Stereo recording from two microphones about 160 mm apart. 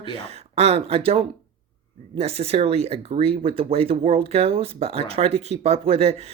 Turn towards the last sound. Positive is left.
turn(degrees=-40)  # may be behind; listen again after turning